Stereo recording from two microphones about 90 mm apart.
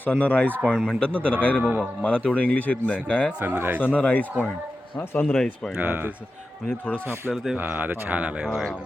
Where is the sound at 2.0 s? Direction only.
15° left (ahead or behind).